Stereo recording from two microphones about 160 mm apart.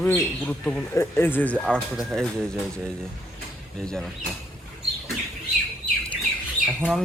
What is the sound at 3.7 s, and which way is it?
Speech, centre (ahead or behind).